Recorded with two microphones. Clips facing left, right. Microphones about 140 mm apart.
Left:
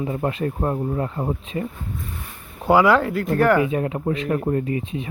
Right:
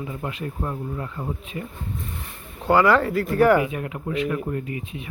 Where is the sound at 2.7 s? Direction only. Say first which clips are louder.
Left 2 dB; 5° left (ahead or behind).